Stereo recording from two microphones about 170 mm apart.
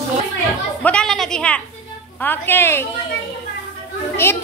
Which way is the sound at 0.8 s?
5° left (ahead or behind).